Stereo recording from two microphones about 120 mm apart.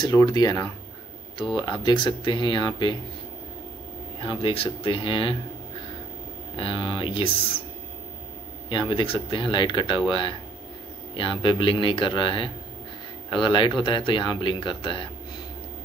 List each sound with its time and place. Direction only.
0.1 s speech: 30° left (ahead or behind)
4.2 s speech: 45° left (ahead or behind)
6.5 s speech: 45° left (ahead or behind)
8.6 s speech: 40° left (ahead or behind)